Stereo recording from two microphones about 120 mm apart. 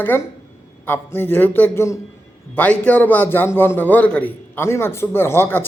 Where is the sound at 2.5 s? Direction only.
10° left (ahead or behind).